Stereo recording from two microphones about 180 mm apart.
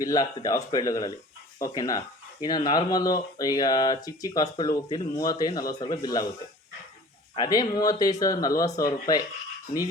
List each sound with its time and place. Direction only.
0.0 s speech: 20° left (ahead or behind)
7.3 s speech: 25° left (ahead or behind)